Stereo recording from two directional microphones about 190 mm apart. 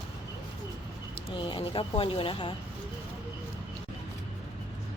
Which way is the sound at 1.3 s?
25° left (ahead or behind).